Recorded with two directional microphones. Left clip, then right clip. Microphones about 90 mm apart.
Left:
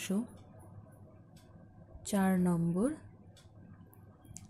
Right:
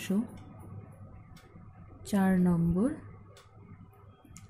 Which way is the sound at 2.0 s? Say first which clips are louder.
Right 3 dB; 25° left (ahead or behind).